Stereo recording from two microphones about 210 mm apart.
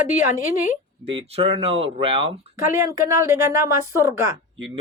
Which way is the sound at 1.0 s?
30° right (ahead or behind).